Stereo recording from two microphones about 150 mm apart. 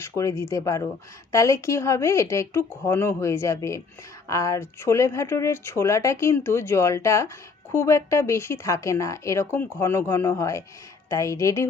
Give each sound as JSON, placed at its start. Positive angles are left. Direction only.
{"t": 0.0, "sound": "speech", "side_deg": 20}